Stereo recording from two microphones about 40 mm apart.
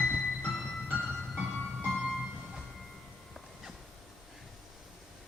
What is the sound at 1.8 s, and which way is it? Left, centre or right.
Music, centre.